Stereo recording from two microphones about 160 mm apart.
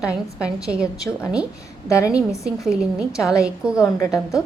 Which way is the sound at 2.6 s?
5° right (ahead or behind).